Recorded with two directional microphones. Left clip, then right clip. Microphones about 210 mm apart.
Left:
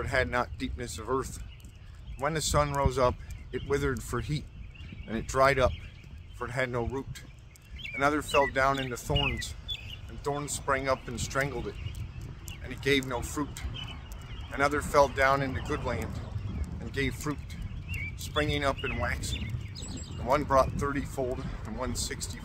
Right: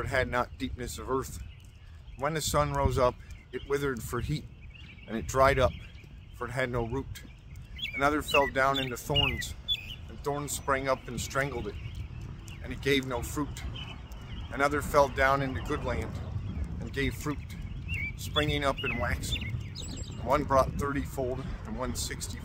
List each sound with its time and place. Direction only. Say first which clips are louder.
0.0 s speech: left 1 dB; 5° right (ahead or behind)
19.7 s a sound: right 1 dB; 45° right (ahead or behind)
20.2 s speech: left 1 dB; 5° right (ahead or behind)